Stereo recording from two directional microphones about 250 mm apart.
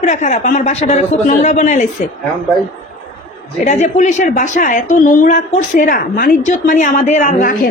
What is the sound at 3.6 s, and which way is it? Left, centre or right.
A woman's voice, left.